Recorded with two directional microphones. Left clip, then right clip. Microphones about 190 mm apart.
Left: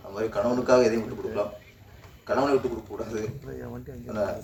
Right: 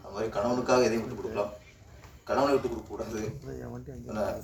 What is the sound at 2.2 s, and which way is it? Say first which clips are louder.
A man's voice: left 2 dB; 65° right (ahead or behind).